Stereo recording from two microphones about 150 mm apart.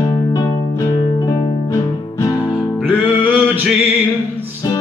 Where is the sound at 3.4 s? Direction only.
10° right (ahead or behind).